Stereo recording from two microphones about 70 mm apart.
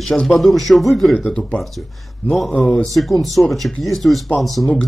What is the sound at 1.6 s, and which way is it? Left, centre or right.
Speech, centre.